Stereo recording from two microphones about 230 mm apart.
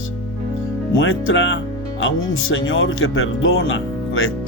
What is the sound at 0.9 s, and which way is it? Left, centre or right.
Speech, left.